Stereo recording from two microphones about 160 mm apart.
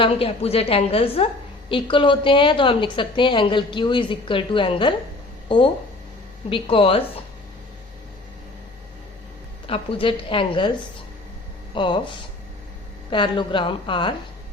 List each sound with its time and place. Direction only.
0.0 s a woman's voice: 35° left (ahead or behind)
9.6 s a woman's voice: 35° left (ahead or behind)